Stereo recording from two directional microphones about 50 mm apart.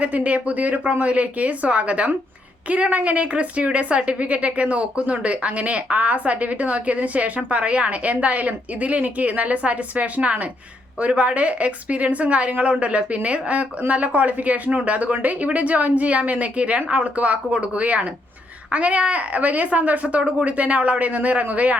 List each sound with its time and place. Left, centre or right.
0.0 s a woman's voice: right